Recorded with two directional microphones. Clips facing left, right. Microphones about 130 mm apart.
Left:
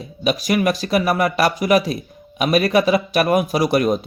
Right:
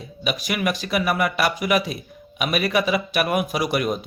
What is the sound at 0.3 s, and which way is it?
Speech, 40° left (ahead or behind).